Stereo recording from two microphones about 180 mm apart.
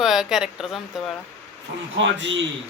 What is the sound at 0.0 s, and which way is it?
Speech, centre (ahead or behind).